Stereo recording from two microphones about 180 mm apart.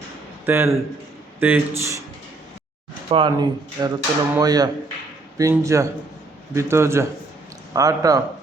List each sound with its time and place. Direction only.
0.4 s speech: 15° right (ahead or behind)
3.1 s speech: 30° right (ahead or behind)